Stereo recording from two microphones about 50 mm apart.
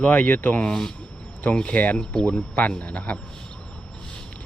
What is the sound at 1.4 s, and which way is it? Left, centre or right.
Speech, left.